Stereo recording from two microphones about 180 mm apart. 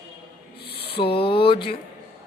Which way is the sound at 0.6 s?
65° left (ahead or behind).